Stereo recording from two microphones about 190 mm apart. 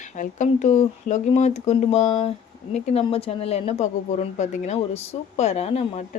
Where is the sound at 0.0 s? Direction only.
40° left (ahead or behind).